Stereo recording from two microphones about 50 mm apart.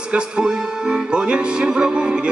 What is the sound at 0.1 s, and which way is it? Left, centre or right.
Speech, centre.